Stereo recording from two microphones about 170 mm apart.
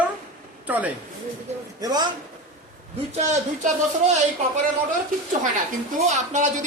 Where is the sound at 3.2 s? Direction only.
40° right (ahead or behind).